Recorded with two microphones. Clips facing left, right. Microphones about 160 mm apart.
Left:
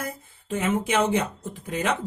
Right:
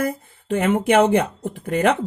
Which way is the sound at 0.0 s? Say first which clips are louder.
Right 10 dB; 60° right (ahead or behind).